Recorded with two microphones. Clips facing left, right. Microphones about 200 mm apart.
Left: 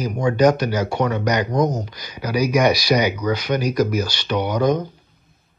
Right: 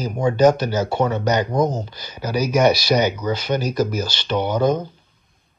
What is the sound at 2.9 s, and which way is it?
Speech, 10° left (ahead or behind).